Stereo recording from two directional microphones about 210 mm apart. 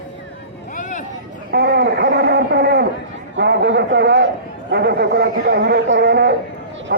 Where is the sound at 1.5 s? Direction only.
50° right (ahead or behind).